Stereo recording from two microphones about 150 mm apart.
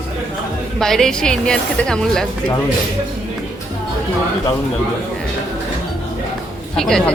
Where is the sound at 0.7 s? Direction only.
5° left (ahead or behind).